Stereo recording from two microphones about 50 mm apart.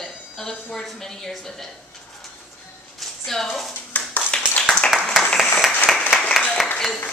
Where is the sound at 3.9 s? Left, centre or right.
Left.